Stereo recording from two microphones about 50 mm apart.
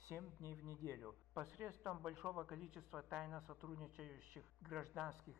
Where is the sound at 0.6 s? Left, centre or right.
Right.